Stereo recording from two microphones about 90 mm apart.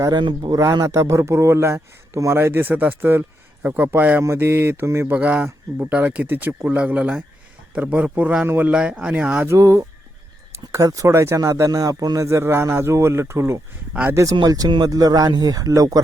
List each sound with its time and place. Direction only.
0.1 s speech: 60° right (ahead or behind)
0.5 s speech: 40° right (ahead or behind); by 9.4 s 10° right (ahead or behind)
9.4 s speech: 30° right (ahead or behind)
12.2 s speech: 30° right (ahead or behind)